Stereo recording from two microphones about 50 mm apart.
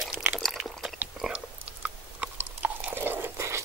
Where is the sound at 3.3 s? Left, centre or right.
Right.